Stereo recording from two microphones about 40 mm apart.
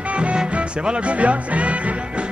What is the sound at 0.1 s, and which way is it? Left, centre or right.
Music, right.